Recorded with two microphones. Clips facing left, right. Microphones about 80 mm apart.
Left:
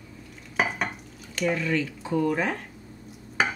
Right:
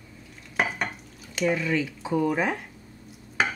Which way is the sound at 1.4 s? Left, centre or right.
Centre.